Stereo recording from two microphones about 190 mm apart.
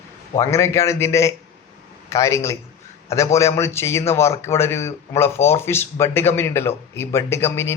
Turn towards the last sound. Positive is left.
turn(degrees=10)  # may be behind; listen again after turning